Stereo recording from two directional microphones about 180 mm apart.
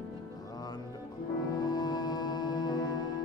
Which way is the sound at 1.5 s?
20° left (ahead or behind).